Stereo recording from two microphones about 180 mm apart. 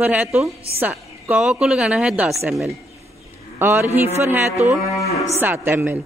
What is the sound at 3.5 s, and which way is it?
A woman's voice, 10° right (ahead or behind).